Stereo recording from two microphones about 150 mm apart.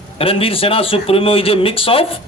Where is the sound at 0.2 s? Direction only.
40° left (ahead or behind).